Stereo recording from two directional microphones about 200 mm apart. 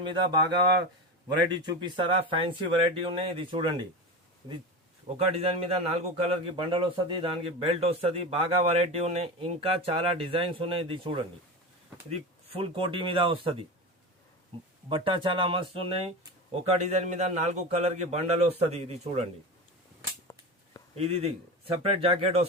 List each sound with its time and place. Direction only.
0.0 s a man's voice: 20° right (ahead or behind)
1.5 s a man's voice: 25° right (ahead or behind)
5.0 s a man's voice: 30° right (ahead or behind)
12.5 s a man's voice: 30° right (ahead or behind)
20.9 s a man's voice: 30° right (ahead or behind)